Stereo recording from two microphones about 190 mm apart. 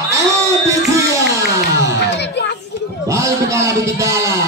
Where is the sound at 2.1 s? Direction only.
60° left (ahead or behind).